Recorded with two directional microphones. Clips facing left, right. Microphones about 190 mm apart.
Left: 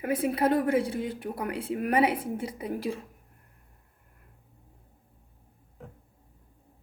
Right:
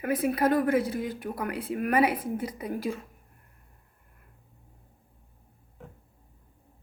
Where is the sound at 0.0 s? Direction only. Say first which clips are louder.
Right 1 dB; 30° left (ahead or behind).